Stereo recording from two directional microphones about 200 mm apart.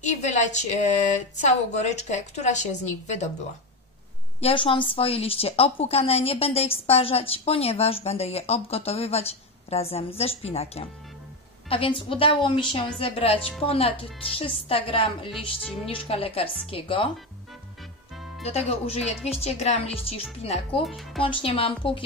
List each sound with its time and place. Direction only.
0.0 s speech: 35° left (ahead or behind)
4.4 s a woman's voice: 30° left (ahead or behind)
18.4 s speech: 30° left (ahead or behind)
20.8 s speech: centre (ahead or behind)
21.2 s a woman's voice: 25° left (ahead or behind)